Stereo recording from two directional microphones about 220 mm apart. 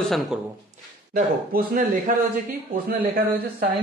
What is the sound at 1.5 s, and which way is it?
Speech, 40° right (ahead or behind).